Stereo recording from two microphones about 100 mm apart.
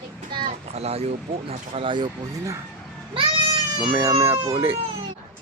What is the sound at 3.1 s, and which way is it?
Cat, 65° right (ahead or behind).